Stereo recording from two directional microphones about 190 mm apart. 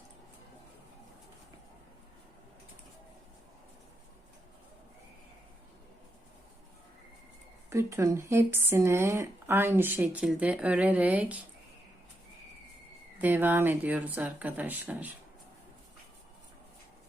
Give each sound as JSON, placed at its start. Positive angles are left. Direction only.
{"t": 7.7, "sound": "speech", "side_deg": -15}
{"t": 13.2, "sound": "speech", "side_deg": -10}